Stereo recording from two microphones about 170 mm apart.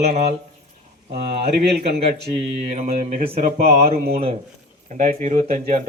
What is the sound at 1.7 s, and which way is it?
Speech, 70° right (ahead or behind).